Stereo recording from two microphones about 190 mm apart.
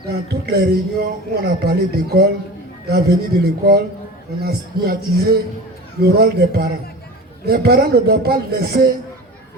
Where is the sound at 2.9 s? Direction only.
55° right (ahead or behind).